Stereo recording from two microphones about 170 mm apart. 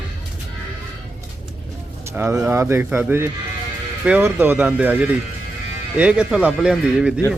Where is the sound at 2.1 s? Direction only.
15° right (ahead or behind).